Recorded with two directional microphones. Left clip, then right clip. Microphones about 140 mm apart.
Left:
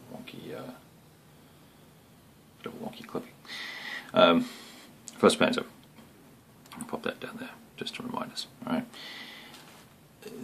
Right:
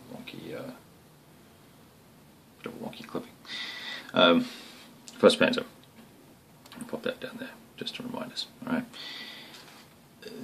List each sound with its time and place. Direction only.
0.2 s a sound: 5° left (ahead or behind)
2.6 s speech: 10° left (ahead or behind)
5.0 s speech: 30° left (ahead or behind)
6.9 s speech: 25° left (ahead or behind)